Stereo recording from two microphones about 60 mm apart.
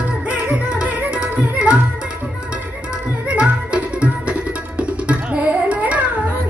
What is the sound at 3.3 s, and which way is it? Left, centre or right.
Music, right.